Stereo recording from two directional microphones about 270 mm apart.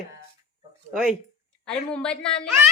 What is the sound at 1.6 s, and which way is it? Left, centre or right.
Speech, centre.